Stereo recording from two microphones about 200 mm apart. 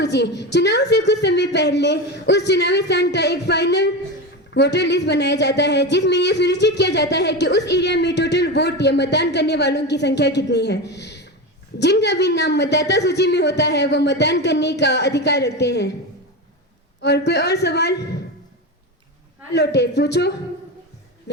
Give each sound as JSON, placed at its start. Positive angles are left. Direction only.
{"t": 0.0, "sound": "a woman's voice", "side_deg": 60}
{"t": 17.0, "sound": "a woman's voice", "side_deg": 55}
{"t": 19.5, "sound": "a woman's voice", "side_deg": 60}